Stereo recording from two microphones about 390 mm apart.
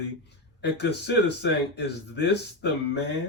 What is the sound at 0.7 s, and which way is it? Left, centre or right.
Speech, left.